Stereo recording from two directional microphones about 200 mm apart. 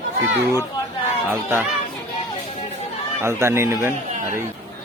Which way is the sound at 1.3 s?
10° right (ahead or behind).